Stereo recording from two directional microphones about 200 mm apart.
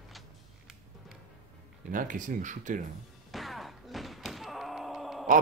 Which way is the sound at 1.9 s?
40° right (ahead or behind).